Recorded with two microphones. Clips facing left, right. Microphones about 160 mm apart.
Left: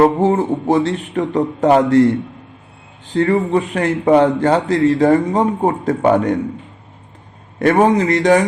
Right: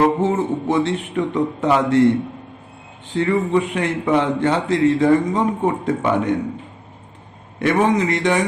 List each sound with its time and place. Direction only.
0.0 s a man's voice: 35° left (ahead or behind)
3.2 s a man's voice: 40° left (ahead or behind)
7.6 s a man's voice: 40° left (ahead or behind)